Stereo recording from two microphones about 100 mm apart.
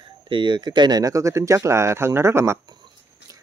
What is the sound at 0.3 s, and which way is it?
Speech, 50° right (ahead or behind).